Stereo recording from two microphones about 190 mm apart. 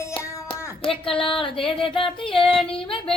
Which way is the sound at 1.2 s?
25° left (ahead or behind).